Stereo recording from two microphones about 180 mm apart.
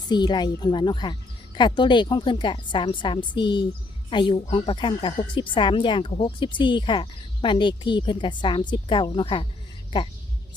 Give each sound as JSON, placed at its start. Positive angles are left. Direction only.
{"t": 0.1, "sound": "speech", "side_deg": 25}